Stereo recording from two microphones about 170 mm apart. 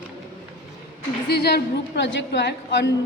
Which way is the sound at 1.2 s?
75° left (ahead or behind).